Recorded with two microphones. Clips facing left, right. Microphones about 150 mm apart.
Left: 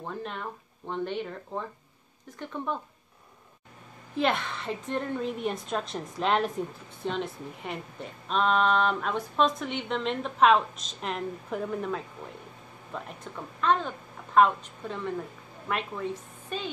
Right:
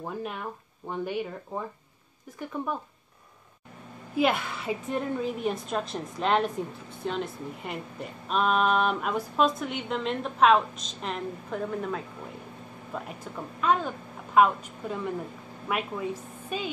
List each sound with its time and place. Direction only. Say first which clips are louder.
0.0 s a woman's voice: right 2 dB; 10° right (ahead or behind)
4.1 s a woman's voice: right 2 dB; 5° right (ahead or behind)